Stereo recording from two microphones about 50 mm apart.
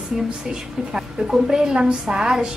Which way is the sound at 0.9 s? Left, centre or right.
Centre.